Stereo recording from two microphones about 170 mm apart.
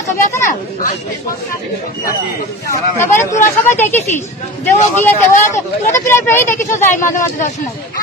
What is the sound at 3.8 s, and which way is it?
Speech, 10° left (ahead or behind).